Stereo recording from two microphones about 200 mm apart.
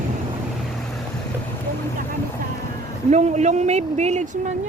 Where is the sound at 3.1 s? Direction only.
35° right (ahead or behind).